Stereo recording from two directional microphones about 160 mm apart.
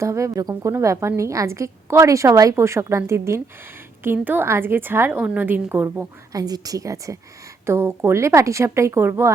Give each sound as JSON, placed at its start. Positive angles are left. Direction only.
{"t": 0.0, "sound": "a woman's voice", "side_deg": -20}